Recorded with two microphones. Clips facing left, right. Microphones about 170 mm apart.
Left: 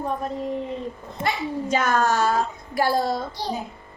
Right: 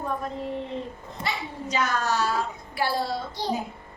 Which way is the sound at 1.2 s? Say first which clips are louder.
Left 7 dB; 50° left (ahead or behind).